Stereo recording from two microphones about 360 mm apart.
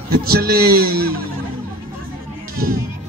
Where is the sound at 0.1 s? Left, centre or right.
Right.